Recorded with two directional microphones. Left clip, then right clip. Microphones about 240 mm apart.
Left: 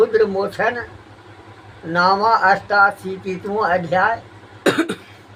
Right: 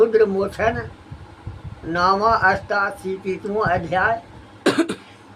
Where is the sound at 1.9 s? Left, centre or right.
Centre.